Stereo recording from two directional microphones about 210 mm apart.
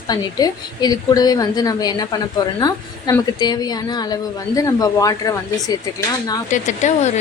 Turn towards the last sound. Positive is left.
turn(degrees=35)  # may be behind; listen again after turning